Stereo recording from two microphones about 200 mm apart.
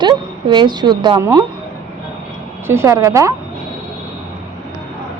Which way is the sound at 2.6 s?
15° right (ahead or behind).